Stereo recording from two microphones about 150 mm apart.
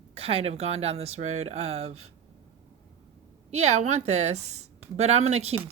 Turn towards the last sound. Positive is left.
turn(degrees=-40)  # may be behind; listen again after turning